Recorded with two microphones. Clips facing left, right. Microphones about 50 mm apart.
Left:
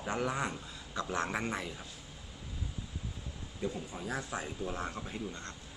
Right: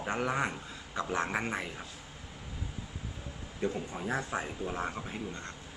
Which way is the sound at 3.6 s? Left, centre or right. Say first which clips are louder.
Right 4 dB; right.